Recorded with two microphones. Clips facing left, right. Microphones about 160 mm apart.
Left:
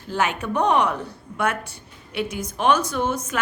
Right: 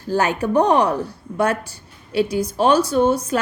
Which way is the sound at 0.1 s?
40° right (ahead or behind).